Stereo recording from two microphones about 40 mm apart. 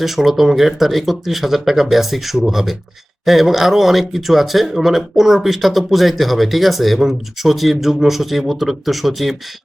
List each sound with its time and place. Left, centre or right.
0.0 s speech: centre